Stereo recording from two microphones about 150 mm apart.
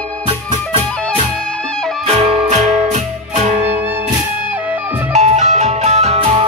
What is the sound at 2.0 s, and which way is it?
Music, 40° right (ahead or behind).